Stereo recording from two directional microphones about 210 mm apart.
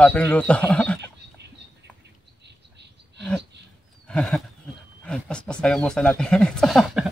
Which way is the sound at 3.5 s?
55° right (ahead or behind).